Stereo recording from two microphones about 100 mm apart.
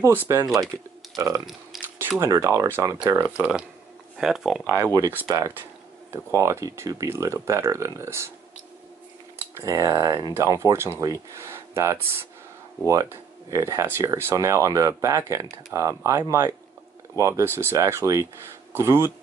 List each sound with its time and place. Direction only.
0.0 s speech: 25° right (ahead or behind)
1.1 s speech: 35° right (ahead or behind)
2.0 s speech: 25° right (ahead or behind)
3.2 s speech: 10° right (ahead or behind)
5.3 s speech: 40° right (ahead or behind)
9.6 s speech: 35° right (ahead or behind)